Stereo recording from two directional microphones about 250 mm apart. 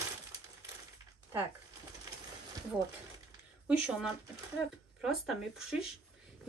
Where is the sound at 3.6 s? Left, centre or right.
Centre.